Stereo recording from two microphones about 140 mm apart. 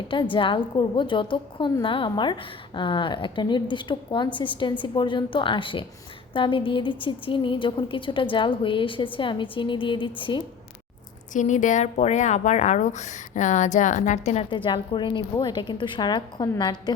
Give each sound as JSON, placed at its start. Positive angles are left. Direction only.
{"t": 0.1, "sound": "a woman's voice", "side_deg": 35}
{"t": 11.3, "sound": "speech", "side_deg": 60}
{"t": 14.5, "sound": "a woman's voice", "side_deg": 35}